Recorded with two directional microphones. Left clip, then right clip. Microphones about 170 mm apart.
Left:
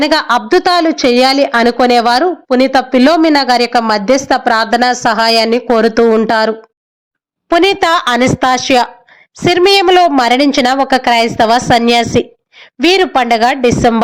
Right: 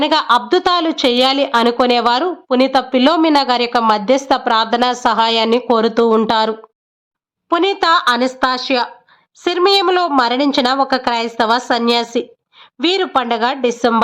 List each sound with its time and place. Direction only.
0.0 s a woman's voice: 15° left (ahead or behind)